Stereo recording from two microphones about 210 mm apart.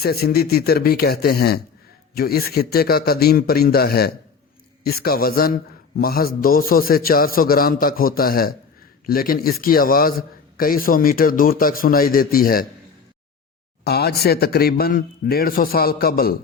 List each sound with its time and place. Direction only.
0.0 s a man's voice: 45° left (ahead or behind)
13.8 s a man's voice: 50° left (ahead or behind)